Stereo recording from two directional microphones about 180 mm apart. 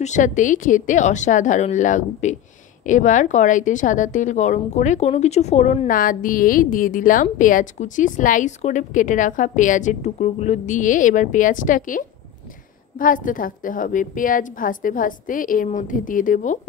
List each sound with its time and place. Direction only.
0.0 s a woman's voice: 45° left (ahead or behind)